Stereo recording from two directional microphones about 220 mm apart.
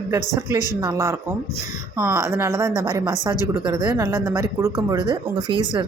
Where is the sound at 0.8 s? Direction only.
15° right (ahead or behind).